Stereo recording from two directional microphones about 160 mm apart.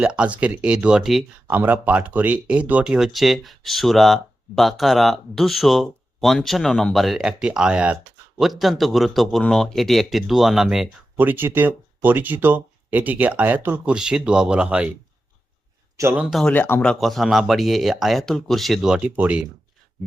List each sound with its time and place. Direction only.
0.0 s a man's voice: 5° right (ahead or behind)
16.0 s speech: 15° right (ahead or behind)
16.2 s a man's voice: centre (ahead or behind)